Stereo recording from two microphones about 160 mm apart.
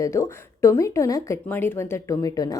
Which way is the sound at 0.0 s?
20° left (ahead or behind).